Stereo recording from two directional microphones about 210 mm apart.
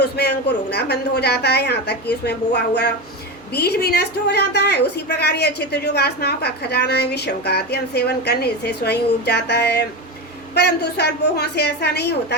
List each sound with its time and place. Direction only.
0.0 s a woman's voice: 55° left (ahead or behind)